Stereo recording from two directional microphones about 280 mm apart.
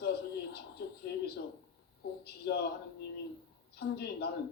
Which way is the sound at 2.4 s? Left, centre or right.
Left.